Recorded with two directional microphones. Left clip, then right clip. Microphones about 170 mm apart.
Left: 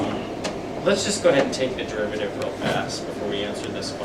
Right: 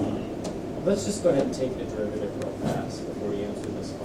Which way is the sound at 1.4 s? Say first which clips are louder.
Left 5 dB; 5° right (ahead or behind).